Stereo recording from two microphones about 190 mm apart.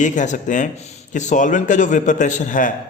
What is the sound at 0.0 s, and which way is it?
A man's voice, 40° left (ahead or behind).